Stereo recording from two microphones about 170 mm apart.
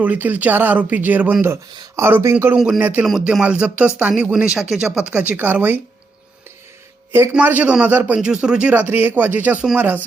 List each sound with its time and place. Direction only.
0.0 s speech: 10° right (ahead or behind)
7.1 s speech: 15° right (ahead or behind)